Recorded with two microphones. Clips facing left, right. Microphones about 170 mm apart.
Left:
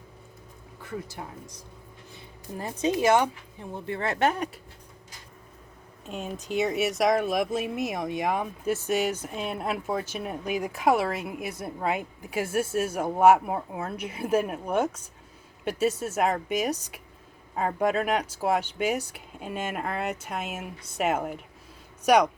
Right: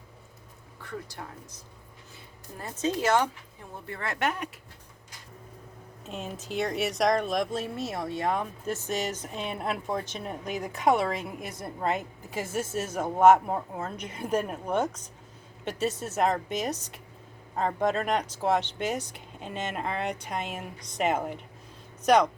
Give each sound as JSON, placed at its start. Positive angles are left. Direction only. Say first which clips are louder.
{"t": 1.2, "sound": "speech", "louder": "left 2 dB", "side_deg": 15}
{"t": 2.6, "sound": "speech", "louder": "left 3 dB", "side_deg": 20}
{"t": 3.8, "sound": "speech", "louder": "left 6 dB", "side_deg": 25}
{"t": 6.1, "sound": "speech", "louder": "left 3 dB", "side_deg": 0}